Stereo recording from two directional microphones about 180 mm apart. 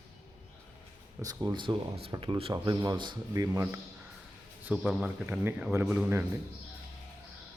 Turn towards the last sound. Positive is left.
turn(degrees=-10)  # may be behind; listen again after turning